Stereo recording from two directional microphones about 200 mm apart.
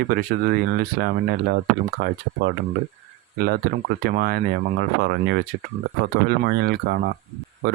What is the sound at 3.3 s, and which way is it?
Speech, 50° right (ahead or behind).